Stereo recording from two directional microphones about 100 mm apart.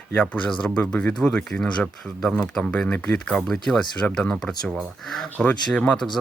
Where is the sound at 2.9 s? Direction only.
15° left (ahead or behind).